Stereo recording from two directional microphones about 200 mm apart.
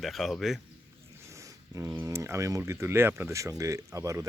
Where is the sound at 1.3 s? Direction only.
15° right (ahead or behind).